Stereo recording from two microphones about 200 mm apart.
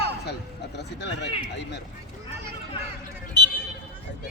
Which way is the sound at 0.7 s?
60° left (ahead or behind).